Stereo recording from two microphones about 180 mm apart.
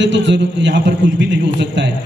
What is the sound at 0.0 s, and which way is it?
Speech, 80° right.